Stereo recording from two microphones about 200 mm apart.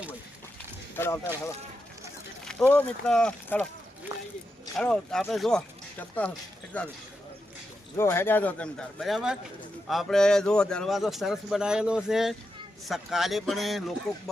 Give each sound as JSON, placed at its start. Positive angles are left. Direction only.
{"t": 0.9, "sound": "speech", "side_deg": 10}
{"t": 2.4, "sound": "a sound", "side_deg": 5}
{"t": 2.7, "sound": "a man's voice", "side_deg": 5}
{"t": 4.1, "sound": "a sound", "side_deg": -15}
{"t": 4.8, "sound": "a man's voice", "side_deg": 5}
{"t": 7.9, "sound": "a man's voice", "side_deg": 10}